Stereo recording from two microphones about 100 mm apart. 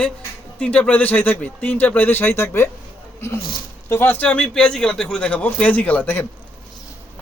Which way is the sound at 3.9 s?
20° left (ahead or behind).